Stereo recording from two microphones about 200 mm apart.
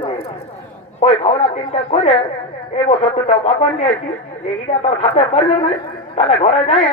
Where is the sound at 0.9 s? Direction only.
30° left (ahead or behind).